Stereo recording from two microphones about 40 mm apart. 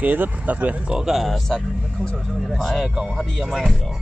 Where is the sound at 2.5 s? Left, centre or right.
Centre.